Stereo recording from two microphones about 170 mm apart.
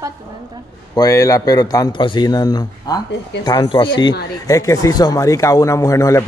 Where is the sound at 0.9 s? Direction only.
20° left (ahead or behind).